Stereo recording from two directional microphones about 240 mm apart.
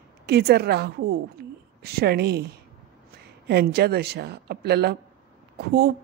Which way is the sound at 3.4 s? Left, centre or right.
Right.